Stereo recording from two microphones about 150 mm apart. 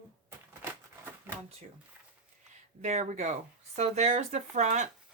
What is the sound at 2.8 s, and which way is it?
Speech, 50° right (ahead or behind).